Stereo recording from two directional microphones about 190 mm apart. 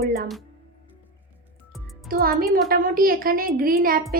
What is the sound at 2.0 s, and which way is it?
A woman's voice, 50° right (ahead or behind).